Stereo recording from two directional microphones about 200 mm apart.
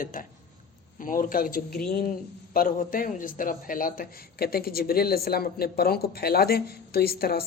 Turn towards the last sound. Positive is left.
turn(degrees=50)  # may be behind; listen again after turning